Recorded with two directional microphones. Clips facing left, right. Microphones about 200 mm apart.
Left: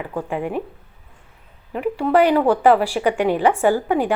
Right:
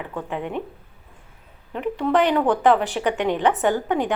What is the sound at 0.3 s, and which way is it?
Speech, 10° left (ahead or behind).